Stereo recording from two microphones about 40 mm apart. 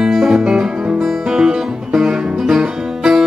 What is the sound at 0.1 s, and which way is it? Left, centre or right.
Music, centre.